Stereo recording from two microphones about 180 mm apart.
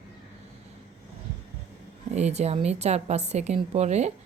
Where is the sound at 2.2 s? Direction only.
40° right (ahead or behind).